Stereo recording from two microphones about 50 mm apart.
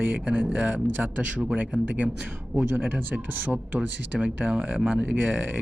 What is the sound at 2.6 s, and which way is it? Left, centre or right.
Speech, right.